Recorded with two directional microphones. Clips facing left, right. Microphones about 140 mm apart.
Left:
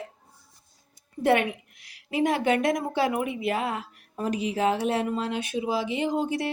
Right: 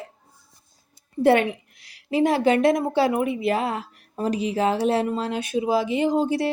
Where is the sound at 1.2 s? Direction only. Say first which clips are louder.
Right 4 dB; 30° right (ahead or behind).